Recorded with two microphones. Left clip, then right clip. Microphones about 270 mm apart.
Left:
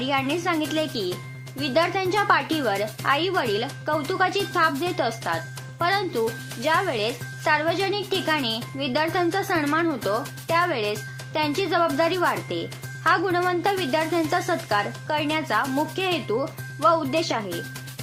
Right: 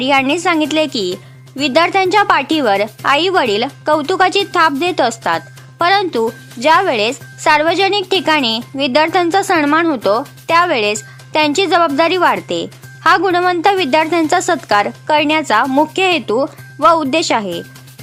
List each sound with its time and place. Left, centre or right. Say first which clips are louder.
0.0 s speech: right 11 dB; right